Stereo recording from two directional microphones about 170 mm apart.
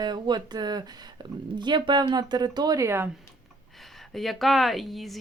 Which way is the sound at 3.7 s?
Centre (ahead or behind).